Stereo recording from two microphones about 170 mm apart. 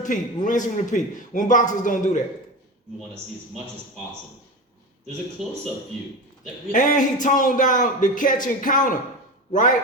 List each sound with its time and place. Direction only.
0.0 s a man's voice: 50° left (ahead or behind)
5.4 s speech: centre (ahead or behind)
6.7 s a man's voice: 50° left (ahead or behind)